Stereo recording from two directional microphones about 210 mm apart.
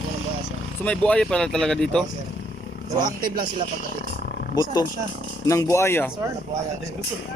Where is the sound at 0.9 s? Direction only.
5° left (ahead or behind).